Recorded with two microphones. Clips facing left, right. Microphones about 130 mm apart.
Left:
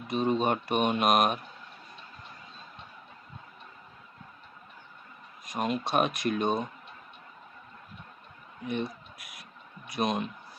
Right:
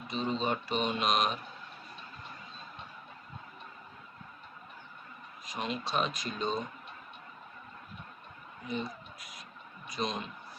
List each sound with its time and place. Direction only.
0.1 s speech: 55° left (ahead or behind)
5.5 s speech: 50° left (ahead or behind)
8.6 s speech: 65° left (ahead or behind)